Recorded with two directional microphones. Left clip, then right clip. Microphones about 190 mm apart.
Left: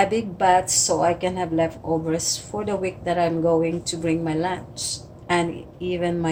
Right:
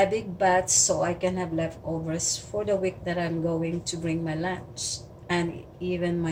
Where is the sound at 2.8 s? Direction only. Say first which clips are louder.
Left 6 dB; 40° left (ahead or behind).